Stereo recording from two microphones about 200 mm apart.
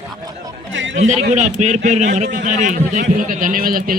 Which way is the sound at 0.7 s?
70° right (ahead or behind).